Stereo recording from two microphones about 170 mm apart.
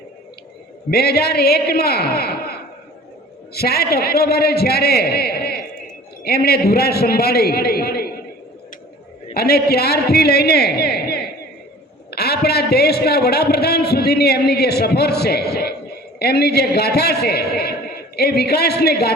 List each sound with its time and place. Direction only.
0.9 s a man's voice: 70° left (ahead or behind)
9.3 s a man's voice: 70° left (ahead or behind)